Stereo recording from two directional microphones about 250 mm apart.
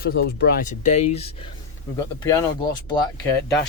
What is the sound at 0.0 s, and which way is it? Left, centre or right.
Speech, left.